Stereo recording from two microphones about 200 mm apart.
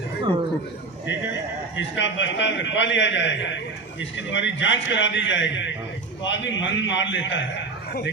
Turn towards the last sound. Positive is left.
turn(degrees=65)  # may be behind; listen again after turning